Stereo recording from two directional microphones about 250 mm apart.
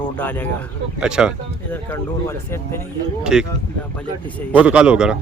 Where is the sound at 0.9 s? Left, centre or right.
Centre.